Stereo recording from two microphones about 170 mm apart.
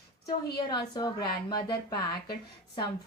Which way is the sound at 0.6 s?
25° left (ahead or behind).